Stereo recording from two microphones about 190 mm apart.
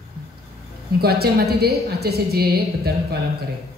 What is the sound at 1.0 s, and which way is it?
A woman's voice, 55° right (ahead or behind).